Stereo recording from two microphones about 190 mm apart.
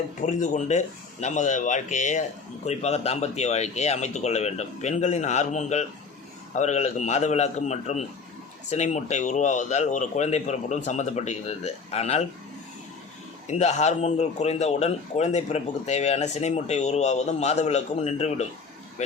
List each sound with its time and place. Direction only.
0.2 s speech: 40° left (ahead or behind)
13.5 s speech: 35° left (ahead or behind)